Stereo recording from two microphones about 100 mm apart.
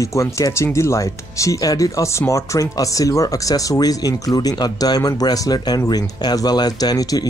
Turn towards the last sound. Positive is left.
turn(degrees=40)  # may be behind; listen again after turning